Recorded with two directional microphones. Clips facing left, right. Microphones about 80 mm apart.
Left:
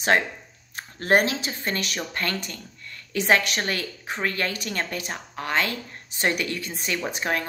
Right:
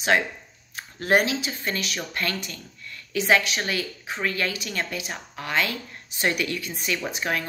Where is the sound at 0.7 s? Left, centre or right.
Left.